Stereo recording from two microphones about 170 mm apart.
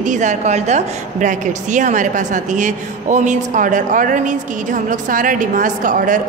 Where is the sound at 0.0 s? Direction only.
45° right (ahead or behind).